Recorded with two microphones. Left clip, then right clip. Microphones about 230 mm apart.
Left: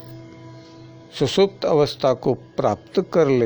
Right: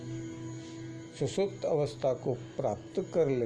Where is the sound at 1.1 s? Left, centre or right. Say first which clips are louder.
Left 13 dB; left.